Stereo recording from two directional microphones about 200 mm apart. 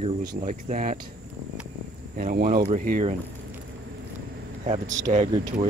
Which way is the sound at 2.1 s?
45° right (ahead or behind).